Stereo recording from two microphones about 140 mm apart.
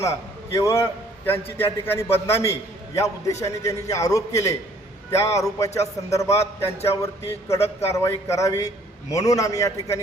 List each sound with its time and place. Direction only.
0.0 s a man's voice: 20° left (ahead or behind)